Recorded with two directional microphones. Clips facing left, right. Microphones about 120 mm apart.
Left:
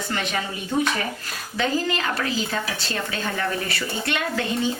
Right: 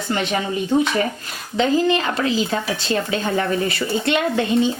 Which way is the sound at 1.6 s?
20° right (ahead or behind).